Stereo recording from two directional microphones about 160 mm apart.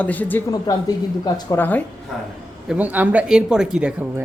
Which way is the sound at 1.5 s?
10° left (ahead or behind).